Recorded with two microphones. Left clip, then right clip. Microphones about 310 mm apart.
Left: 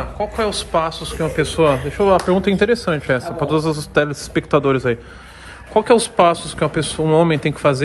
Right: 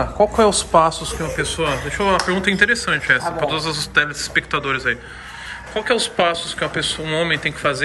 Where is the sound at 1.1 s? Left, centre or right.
Centre.